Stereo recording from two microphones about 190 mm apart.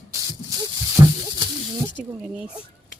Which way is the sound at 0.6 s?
20° right (ahead or behind).